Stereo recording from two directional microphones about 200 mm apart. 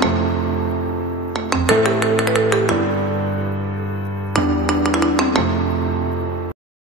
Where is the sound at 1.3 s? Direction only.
Centre (ahead or behind).